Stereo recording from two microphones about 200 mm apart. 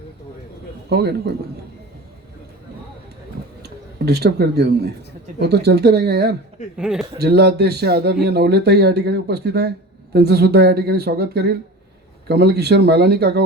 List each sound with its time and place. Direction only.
0.9 s speech: 55° right (ahead or behind)
3.6 s speech: 55° right (ahead or behind)
6.7 s speech: 5° right (ahead or behind)
7.2 s speech: 55° right (ahead or behind)